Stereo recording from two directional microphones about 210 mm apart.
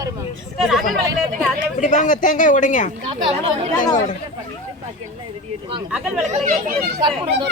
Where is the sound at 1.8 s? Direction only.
40° left (ahead or behind).